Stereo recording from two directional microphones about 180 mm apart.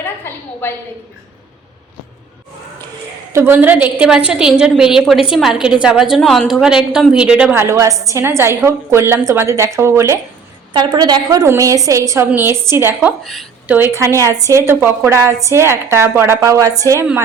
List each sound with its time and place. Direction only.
0.3 s a sound: 15° left (ahead or behind)
0.6 s a woman's voice: 10° left (ahead or behind)
3.3 s a woman's voice: 10° right (ahead or behind)
13.7 s a woman's voice: 15° right (ahead or behind)